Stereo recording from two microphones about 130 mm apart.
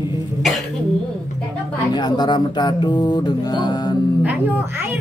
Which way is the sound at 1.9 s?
35° left (ahead or behind).